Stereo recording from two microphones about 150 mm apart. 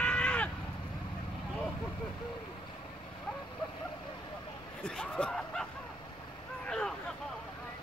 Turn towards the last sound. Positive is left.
turn(degrees=5)  # may be behind; listen again after turning